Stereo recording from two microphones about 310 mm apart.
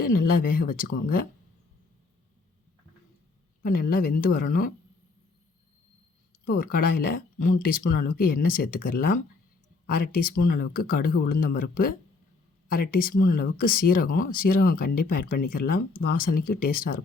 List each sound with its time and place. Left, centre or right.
0.4 s speech: left
3.6 s speech: left
6.4 s speech: left
16.4 s speech: left
16.6 s speech: left